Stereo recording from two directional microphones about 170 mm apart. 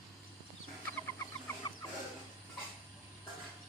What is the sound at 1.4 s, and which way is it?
Cluck, 20° left (ahead or behind).